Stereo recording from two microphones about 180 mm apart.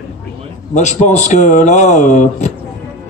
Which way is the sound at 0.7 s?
40° left (ahead or behind).